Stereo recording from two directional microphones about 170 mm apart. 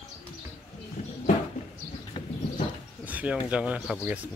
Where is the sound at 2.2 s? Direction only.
40° left (ahead or behind).